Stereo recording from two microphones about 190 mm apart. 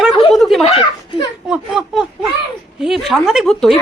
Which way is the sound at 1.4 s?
5° right (ahead or behind).